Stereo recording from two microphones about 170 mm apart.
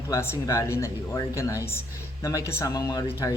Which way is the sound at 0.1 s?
15° left (ahead or behind).